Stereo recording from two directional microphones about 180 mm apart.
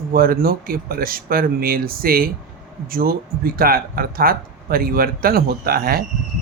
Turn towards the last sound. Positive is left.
turn(degrees=-55)  # may be behind; listen again after turning